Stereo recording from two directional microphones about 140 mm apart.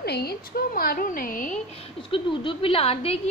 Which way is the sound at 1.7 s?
40° left (ahead or behind).